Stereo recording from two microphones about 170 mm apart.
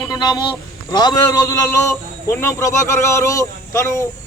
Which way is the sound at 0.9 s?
25° left (ahead or behind).